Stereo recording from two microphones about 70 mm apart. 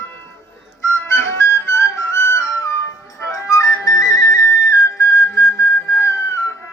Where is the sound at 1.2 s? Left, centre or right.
Left.